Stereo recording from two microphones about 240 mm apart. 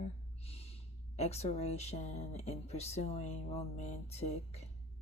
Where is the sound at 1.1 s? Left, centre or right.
Left.